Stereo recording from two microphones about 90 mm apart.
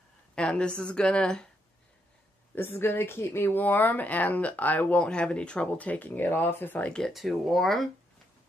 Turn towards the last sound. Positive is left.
turn(degrees=0)  # may be behind; listen again after turning